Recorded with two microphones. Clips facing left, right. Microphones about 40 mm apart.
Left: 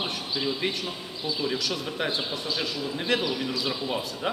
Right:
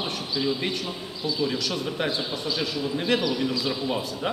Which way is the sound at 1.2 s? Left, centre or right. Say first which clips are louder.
Right 3 dB; centre.